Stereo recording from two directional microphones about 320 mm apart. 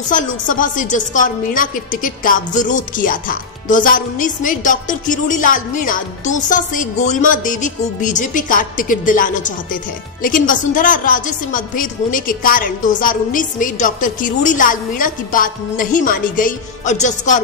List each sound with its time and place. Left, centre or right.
0.1 s a woman's voice: left